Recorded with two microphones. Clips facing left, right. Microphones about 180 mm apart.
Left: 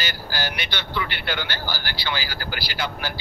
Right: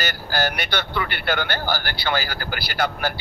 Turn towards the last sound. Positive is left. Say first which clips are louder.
# right 5 dB
turn(degrees=-50)  # may be behind; listen again after turning